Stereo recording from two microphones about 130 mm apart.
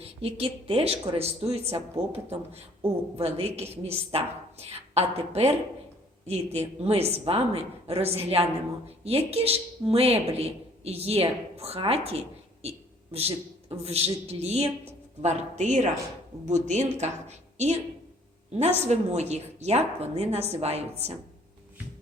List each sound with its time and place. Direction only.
0.0 s speech: 50° right (ahead or behind)
3.2 s speech: 50° right (ahead or behind)